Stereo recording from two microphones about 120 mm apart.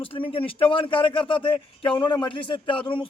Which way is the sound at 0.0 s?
50° left (ahead or behind).